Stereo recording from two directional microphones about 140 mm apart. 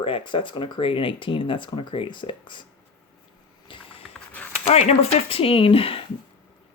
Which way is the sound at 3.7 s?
40° left (ahead or behind).